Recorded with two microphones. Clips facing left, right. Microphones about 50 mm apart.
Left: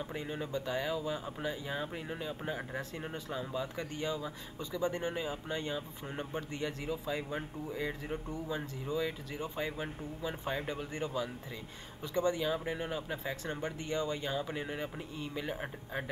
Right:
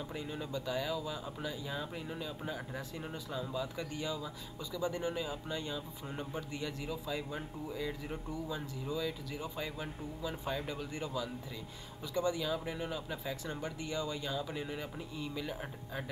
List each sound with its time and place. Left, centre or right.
0.0 s speech: left